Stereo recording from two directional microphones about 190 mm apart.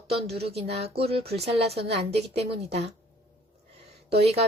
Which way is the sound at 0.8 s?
30° right (ahead or behind).